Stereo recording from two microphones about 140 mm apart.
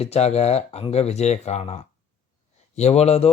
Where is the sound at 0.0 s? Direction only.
50° left (ahead or behind).